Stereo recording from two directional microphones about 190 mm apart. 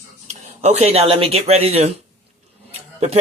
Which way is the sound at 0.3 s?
35° right (ahead or behind).